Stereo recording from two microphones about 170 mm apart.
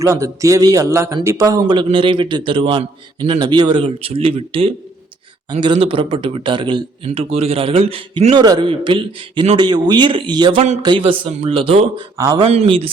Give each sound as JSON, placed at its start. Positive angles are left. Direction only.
{"t": 0.0, "sound": "a man's voice", "side_deg": -20}
{"t": 12.1, "sound": "a man's voice", "side_deg": -20}
{"t": 12.4, "sound": "a man's voice", "side_deg": -35}